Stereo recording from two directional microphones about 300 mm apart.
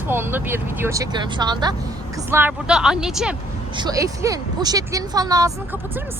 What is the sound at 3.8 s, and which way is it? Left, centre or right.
Speech, centre.